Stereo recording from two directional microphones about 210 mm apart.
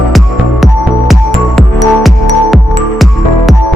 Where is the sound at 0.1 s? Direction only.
Centre (ahead or behind).